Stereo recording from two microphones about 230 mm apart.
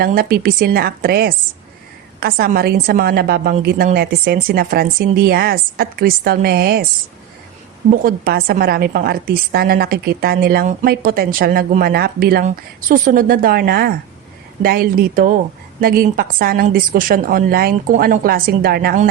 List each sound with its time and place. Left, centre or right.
0.0 s a woman's voice: right
7.9 s a woman's voice: right